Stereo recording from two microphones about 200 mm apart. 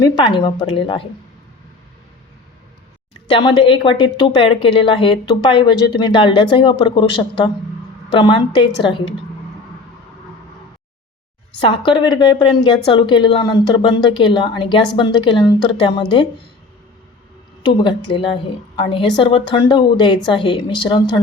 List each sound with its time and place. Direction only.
0.0 s a woman's voice: 20° left (ahead or behind)
3.2 s a woman's voice: 25° left (ahead or behind)
11.9 s a woman's voice: 25° left (ahead or behind)
17.6 s a woman's voice: 25° left (ahead or behind)